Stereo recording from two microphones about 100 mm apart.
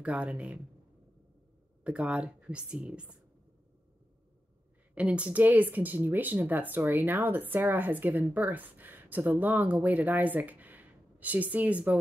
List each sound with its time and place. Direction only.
0.0 s speech: 15° right (ahead or behind)
1.9 s speech: 10° right (ahead or behind)
4.9 s speech: 10° right (ahead or behind)